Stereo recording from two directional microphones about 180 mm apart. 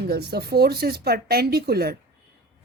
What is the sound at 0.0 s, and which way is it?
A woman's voice, 65° right (ahead or behind).